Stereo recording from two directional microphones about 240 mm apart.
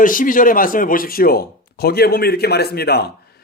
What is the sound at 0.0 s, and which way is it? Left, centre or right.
Speech, left.